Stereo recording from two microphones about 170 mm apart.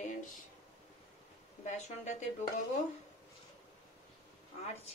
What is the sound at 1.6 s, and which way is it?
Speech, 45° left (ahead or behind).